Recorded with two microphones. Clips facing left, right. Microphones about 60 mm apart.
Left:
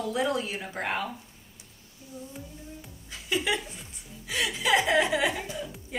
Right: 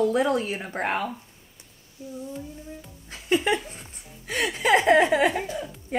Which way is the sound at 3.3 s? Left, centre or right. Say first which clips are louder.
Right 5 dB; right.